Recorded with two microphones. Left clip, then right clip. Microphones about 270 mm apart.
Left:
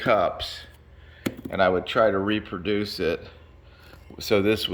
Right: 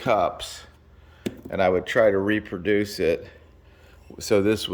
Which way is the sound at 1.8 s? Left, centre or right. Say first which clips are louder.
Right 2 dB; centre.